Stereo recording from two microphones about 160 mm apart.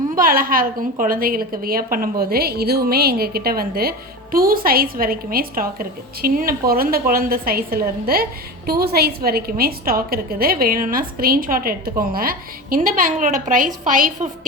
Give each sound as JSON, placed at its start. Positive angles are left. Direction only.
{"t": 0.2, "sound": "a woman's voice", "side_deg": -65}